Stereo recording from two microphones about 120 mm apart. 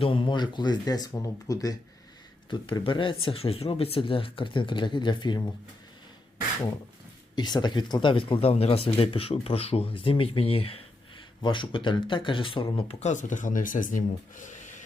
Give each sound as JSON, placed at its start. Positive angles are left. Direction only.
{"t": 0.0, "sound": "speech", "side_deg": 45}
{"t": 2.5, "sound": "speech", "side_deg": 45}
{"t": 7.3, "sound": "speech", "side_deg": 35}
{"t": 12.7, "sound": "speech", "side_deg": 65}